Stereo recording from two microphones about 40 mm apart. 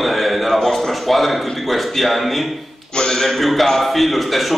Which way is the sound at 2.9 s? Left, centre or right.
Centre.